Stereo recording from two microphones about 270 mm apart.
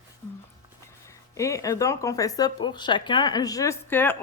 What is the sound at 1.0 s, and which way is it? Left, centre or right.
Speech, centre.